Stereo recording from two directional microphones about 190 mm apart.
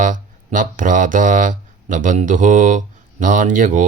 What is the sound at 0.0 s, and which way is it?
Speech, 45° right (ahead or behind).